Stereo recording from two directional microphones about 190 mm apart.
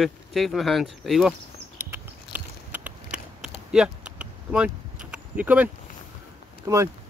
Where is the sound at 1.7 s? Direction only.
10° right (ahead or behind).